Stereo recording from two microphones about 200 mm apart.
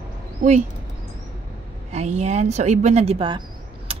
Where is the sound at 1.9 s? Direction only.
35° right (ahead or behind).